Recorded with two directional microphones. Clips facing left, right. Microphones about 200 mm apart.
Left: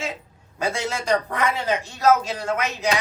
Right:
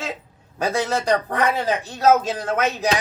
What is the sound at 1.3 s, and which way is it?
Speech, 35° right (ahead or behind).